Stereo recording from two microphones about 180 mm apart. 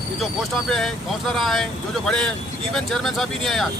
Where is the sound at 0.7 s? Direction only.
Centre (ahead or behind).